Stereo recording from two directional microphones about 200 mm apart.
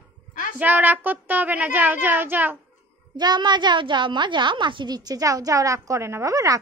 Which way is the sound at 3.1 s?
20° right (ahead or behind).